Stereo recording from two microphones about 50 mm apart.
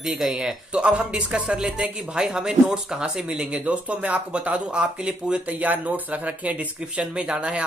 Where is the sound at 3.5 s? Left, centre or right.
Right.